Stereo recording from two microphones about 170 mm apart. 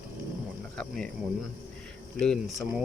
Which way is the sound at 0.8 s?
5° left (ahead or behind).